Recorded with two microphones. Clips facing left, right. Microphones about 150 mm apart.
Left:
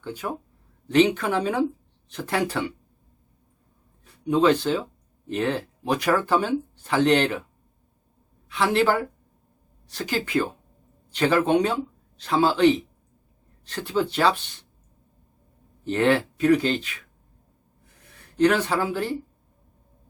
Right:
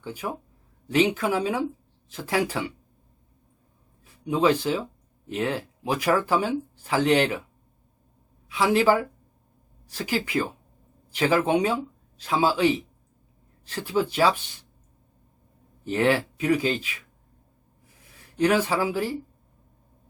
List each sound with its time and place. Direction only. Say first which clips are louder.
0.0 s speech: left 1 dB; 10° right (ahead or behind)
4.0 s speech: left 2 dB; 10° right (ahead or behind)
8.4 s speech: right 1 dB; 10° right (ahead or behind)
15.9 s speech: left 2 dB; 10° right (ahead or behind)
18.3 s speech: left 1 dB; 10° right (ahead or behind)